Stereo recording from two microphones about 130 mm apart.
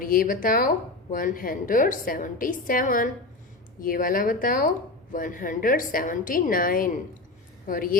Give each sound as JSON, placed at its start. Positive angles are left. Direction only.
{"t": 0.0, "sound": "a woman's voice", "side_deg": 90}